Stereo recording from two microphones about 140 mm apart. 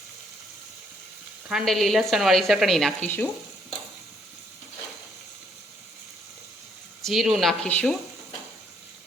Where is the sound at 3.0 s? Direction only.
15° left (ahead or behind).